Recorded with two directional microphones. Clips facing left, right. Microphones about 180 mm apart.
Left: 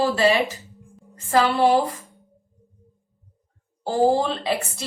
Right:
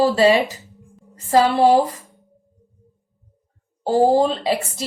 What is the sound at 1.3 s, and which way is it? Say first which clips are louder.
Speech: right 4 dB; 40° right (ahead or behind).